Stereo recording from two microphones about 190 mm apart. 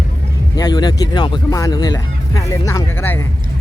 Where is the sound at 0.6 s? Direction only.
20° left (ahead or behind).